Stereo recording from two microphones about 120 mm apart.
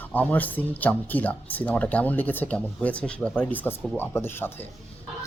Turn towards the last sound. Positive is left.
turn(degrees=20)  # may be behind; listen again after turning